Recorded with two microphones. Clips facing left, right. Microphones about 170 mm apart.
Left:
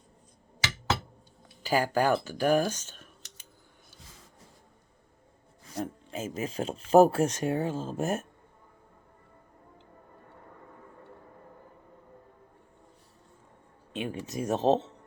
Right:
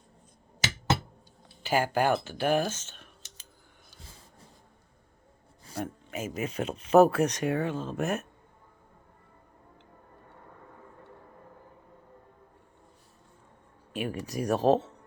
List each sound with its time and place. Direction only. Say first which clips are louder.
1.6 s speech: even; 40° left (ahead or behind)
5.8 s speech: even; 30° left (ahead or behind)
13.9 s speech: right 1 dB; 25° left (ahead or behind)